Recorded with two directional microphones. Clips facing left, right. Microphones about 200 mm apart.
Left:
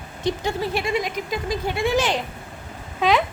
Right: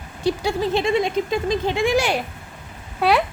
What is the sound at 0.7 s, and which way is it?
Speech, 25° right (ahead or behind).